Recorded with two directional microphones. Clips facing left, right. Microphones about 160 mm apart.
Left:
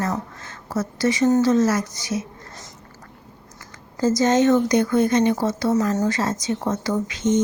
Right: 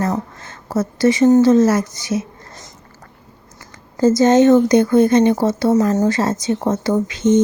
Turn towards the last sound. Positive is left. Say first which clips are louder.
# right 6 dB
turn(degrees=-25)  # may be behind; listen again after turning